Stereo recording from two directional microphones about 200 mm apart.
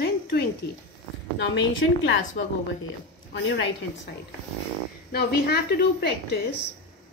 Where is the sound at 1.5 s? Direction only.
70° left (ahead or behind).